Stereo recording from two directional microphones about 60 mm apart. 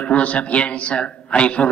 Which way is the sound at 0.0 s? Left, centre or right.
Left.